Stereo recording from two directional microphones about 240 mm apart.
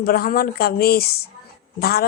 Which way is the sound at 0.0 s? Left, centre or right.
Left.